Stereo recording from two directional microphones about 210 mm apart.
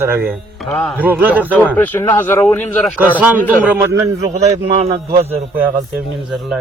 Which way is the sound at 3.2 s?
10° right (ahead or behind).